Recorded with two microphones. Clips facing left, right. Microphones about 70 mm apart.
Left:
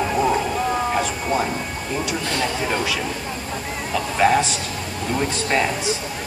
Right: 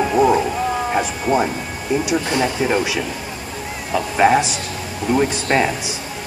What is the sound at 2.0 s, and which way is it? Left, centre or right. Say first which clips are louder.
Speech: right 3 dB; centre.